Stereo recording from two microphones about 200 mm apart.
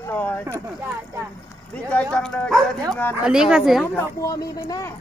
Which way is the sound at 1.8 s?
5° left (ahead or behind).